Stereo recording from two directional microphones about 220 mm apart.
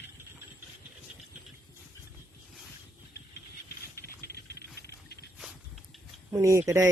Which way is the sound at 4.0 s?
45° left (ahead or behind).